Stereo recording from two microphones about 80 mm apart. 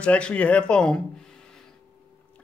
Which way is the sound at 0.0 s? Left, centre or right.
Centre.